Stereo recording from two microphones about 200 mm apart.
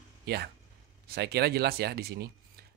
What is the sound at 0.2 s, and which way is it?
A man's voice, 55° right (ahead or behind).